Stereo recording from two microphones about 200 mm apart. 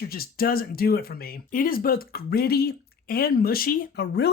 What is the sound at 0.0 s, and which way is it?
Speech, 50° left (ahead or behind).